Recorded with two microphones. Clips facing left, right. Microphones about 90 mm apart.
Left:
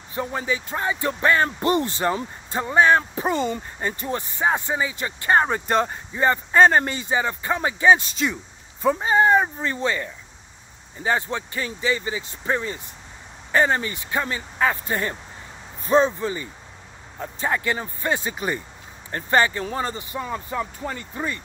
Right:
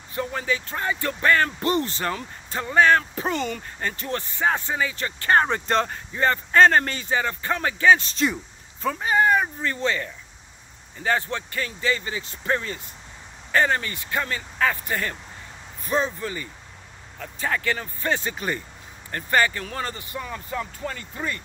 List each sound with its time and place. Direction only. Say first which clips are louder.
0.1 s speech: left 1 dB; 20° left (ahead or behind)
8.1 s speech: right 1 dB; centre (ahead or behind)
8.8 s speech: left 3 dB; 25° left (ahead or behind)